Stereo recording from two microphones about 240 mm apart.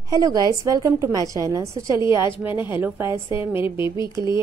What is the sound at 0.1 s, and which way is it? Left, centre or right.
Speech, centre.